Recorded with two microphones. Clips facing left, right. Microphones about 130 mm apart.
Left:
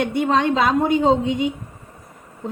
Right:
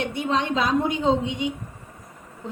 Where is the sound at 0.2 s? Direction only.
50° left (ahead or behind).